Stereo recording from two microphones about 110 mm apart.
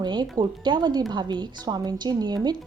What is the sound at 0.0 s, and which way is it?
A woman's voice, 40° right (ahead or behind).